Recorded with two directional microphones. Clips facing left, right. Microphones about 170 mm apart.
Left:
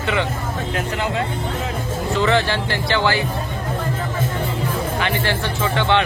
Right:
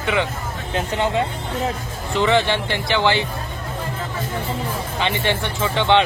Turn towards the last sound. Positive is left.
turn(degrees=-20)  # may be behind; listen again after turning